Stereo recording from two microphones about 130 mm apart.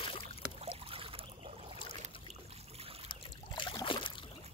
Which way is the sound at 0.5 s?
45° right (ahead or behind).